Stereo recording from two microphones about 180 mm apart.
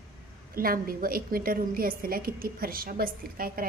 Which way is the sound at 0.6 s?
55° right (ahead or behind).